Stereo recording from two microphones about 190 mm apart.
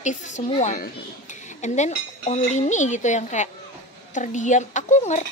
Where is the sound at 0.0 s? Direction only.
40° left (ahead or behind).